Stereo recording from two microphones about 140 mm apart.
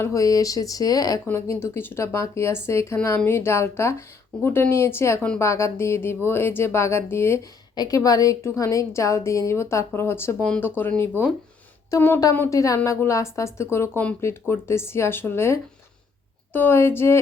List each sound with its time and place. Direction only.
0.0 s a woman's voice: 20° left (ahead or behind)